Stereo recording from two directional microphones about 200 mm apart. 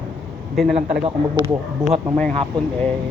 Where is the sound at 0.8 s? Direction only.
30° right (ahead or behind).